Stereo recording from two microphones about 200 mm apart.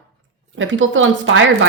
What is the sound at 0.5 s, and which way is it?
Speech, 70° right (ahead or behind).